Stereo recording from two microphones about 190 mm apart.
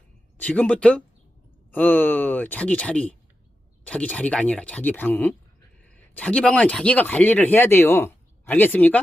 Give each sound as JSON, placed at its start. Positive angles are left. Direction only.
{"t": 0.3, "sound": "speech", "side_deg": 5}